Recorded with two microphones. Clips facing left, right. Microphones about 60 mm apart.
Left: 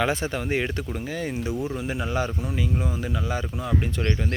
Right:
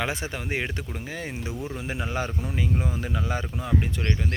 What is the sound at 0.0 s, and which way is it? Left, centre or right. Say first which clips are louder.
Speech: left 5 dB; centre.